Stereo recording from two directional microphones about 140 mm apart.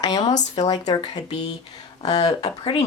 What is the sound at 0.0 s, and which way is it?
Speech, 30° left (ahead or behind).